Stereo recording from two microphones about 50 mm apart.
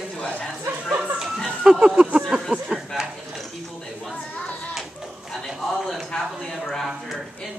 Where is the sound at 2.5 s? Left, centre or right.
Centre.